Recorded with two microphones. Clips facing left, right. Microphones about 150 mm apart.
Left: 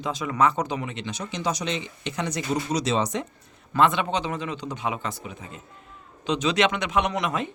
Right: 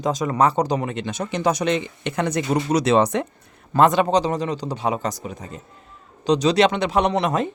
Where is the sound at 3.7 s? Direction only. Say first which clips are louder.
Right 6 dB; 40° right (ahead or behind).